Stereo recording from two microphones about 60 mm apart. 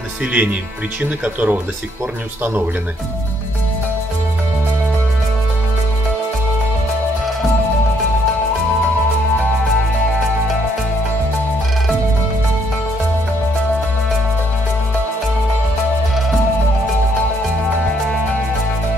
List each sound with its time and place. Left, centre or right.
0.2 s speech: right